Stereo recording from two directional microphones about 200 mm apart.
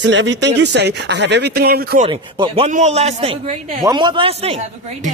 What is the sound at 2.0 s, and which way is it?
A man's voice, 25° right (ahead or behind).